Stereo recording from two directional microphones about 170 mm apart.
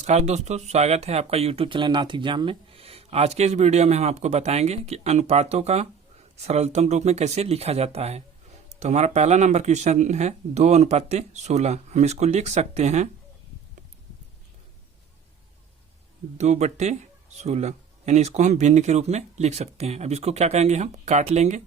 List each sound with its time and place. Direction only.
0.0 s speech: 40° right (ahead or behind)
16.4 s speech: 40° right (ahead or behind)